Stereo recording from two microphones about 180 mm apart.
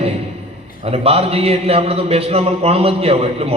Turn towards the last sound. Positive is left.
turn(degrees=-35)  # may be behind; listen again after turning